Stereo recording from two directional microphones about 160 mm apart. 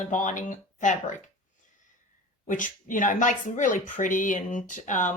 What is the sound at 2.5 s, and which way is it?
Speech, 55° left (ahead or behind).